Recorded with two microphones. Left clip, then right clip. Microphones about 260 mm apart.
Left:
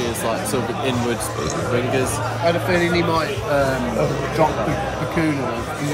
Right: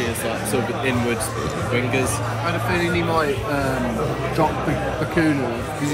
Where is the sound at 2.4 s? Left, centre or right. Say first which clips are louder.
Left 4 dB; left.